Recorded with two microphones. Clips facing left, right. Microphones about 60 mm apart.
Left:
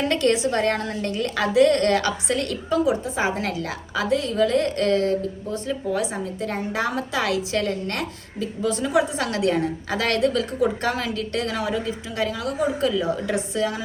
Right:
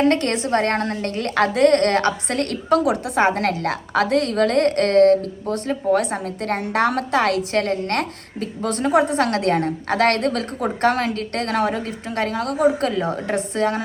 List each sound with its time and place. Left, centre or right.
0.0 s a woman's voice: right